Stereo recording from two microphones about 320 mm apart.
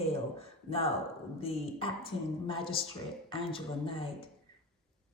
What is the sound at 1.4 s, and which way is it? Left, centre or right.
A woman's voice, centre.